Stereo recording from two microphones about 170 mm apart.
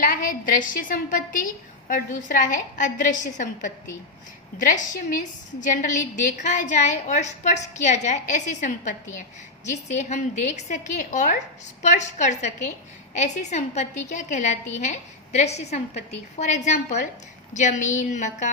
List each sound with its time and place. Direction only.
0.0 s a woman's voice: 55° left (ahead or behind)
9.9 s a woman's voice: 45° left (ahead or behind)